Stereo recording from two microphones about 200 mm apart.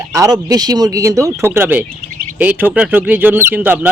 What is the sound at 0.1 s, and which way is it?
Speech, 20° right (ahead or behind).